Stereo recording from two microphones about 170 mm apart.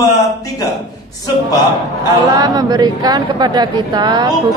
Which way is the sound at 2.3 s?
25° right (ahead or behind).